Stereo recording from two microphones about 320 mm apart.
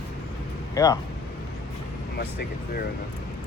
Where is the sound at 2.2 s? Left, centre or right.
Left.